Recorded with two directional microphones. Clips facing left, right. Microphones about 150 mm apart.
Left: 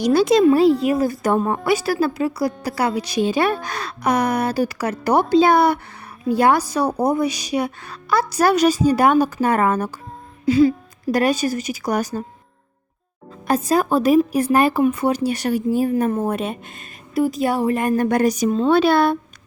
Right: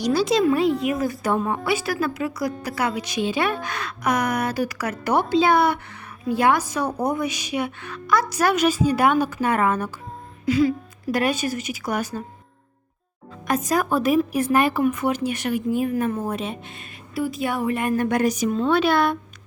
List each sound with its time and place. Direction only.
0.0 s speech: 55° left (ahead or behind)
0.4 s a woman's voice: 35° left (ahead or behind)
1.3 s a woman's voice: 45° left (ahead or behind)
10.4 s a woman's voice: 30° left (ahead or behind)
13.5 s a woman's voice: 30° left (ahead or behind)
16.2 s a woman's voice: 55° left (ahead or behind); by 19.1 s 35° left (ahead or behind)